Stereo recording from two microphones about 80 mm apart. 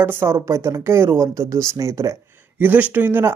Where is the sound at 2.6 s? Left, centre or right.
Right.